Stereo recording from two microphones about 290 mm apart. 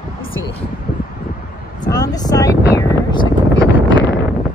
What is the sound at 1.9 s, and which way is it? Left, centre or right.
Speech, centre.